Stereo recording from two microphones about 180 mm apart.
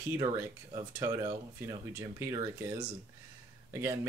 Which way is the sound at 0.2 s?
20° right (ahead or behind).